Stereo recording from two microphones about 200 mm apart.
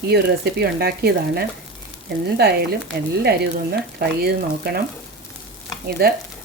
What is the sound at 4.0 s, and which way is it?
Speech, 50° right (ahead or behind).